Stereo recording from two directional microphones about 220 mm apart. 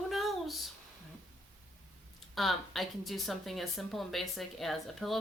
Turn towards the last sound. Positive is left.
turn(degrees=0)  # may be behind; listen again after turning